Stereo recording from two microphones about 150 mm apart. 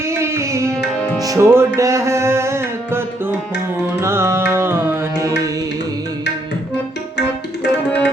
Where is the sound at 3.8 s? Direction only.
15° right (ahead or behind).